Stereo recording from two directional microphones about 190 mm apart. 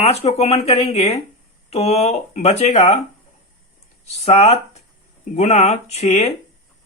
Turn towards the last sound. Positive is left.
turn(degrees=35)  # may be behind; listen again after turning